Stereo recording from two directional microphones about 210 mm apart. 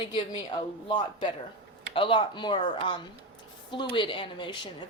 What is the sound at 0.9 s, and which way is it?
Speech, 20° left (ahead or behind).